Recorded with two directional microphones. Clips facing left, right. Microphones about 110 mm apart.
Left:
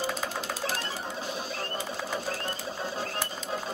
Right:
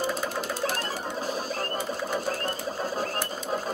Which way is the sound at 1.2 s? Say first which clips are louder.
Right 4 dB; 45° right (ahead or behind).